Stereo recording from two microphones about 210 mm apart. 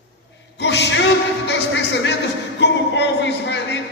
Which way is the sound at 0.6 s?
55° left (ahead or behind).